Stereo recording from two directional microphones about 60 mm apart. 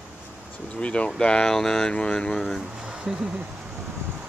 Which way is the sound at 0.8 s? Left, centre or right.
Centre.